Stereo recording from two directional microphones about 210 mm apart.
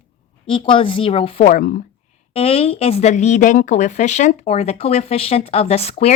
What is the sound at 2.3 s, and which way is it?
Speech, 30° left (ahead or behind).